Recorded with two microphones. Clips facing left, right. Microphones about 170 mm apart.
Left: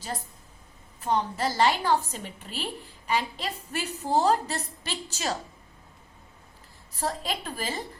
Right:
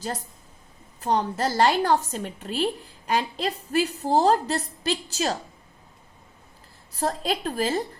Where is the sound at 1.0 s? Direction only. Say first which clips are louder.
Right 3 dB; 40° right (ahead or behind).